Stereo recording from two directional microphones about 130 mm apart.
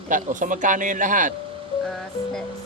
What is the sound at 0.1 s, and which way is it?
Speech, 85° right.